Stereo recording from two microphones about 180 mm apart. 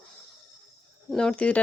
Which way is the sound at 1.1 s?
5° left (ahead or behind).